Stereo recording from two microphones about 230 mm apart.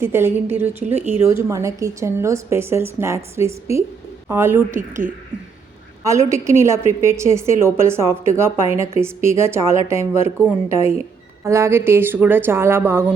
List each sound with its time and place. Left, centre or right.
0.0 s a woman's voice: centre
6.1 s a woman's voice: centre